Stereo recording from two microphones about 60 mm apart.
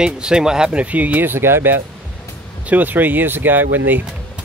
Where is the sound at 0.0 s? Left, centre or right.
Centre; by 1.8 s right.